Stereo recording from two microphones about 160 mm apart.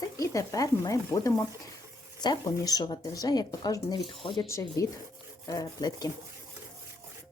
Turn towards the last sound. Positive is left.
turn(degrees=25)  # may be behind; listen again after turning